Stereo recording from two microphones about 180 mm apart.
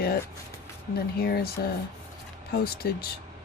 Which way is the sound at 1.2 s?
60° left (ahead or behind).